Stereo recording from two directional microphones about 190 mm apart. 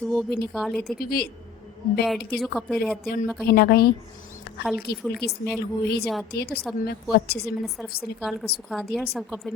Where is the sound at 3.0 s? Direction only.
55° left (ahead or behind).